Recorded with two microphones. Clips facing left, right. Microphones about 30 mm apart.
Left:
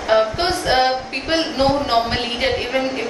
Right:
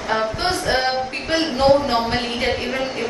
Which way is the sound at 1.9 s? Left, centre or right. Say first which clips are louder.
Left 2 dB; centre.